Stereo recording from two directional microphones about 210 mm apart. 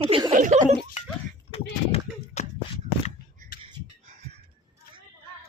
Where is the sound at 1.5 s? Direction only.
30° left (ahead or behind).